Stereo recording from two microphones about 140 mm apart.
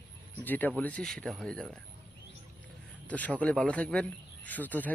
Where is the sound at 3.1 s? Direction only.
10° left (ahead or behind).